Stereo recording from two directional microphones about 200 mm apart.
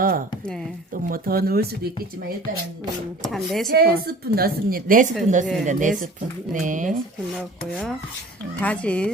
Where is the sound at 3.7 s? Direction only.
50° right (ahead or behind).